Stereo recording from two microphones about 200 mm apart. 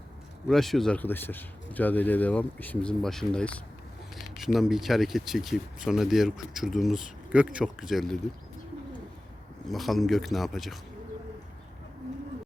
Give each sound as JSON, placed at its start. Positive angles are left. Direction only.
{"t": 0.4, "sound": "a man's voice", "side_deg": 0}
{"t": 9.6, "sound": "speech", "side_deg": 0}